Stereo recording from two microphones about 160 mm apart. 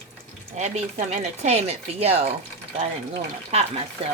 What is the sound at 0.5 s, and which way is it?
Speech, 45° right (ahead or behind).